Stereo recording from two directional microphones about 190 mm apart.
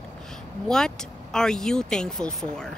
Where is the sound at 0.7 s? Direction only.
5° left (ahead or behind).